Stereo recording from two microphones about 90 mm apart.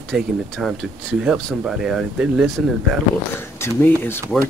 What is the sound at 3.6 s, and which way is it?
Speech, 30° left (ahead or behind).